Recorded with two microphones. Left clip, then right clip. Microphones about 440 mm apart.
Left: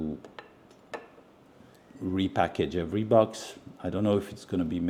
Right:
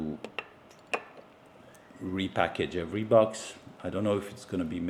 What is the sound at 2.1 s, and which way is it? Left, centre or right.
Speech, left.